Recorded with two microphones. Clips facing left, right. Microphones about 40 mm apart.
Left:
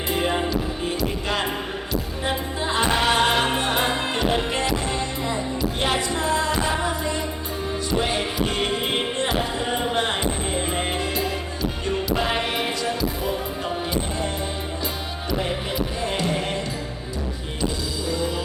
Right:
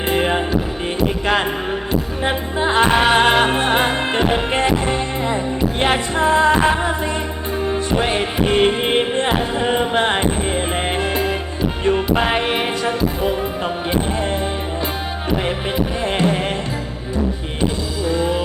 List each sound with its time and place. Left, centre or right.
0.1 s music: right
2.2 s music: right
16.0 s music: right
18.1 s music: right